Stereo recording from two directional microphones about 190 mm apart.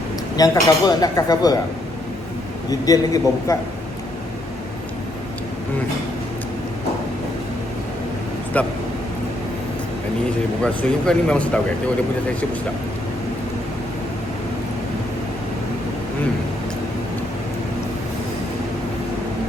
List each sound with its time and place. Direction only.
0.3 s speech: 20° left (ahead or behind)
2.6 s speech: 20° left (ahead or behind)
8.5 s speech: 10° left (ahead or behind)
10.6 s speech: 5° left (ahead or behind)